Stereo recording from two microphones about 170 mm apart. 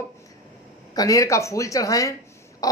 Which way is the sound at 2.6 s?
20° left (ahead or behind).